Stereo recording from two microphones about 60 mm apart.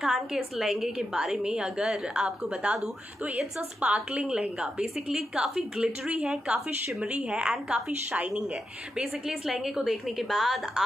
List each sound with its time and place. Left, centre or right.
0.0 s a woman's voice: centre
3.8 s a woman's voice: centre
9.8 s a woman's voice: centre